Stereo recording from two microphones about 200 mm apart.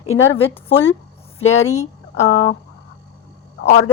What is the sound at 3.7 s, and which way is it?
Speech, 35° left (ahead or behind).